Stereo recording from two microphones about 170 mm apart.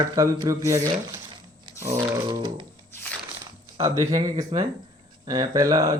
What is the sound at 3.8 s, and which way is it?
Speech, 20° right (ahead or behind).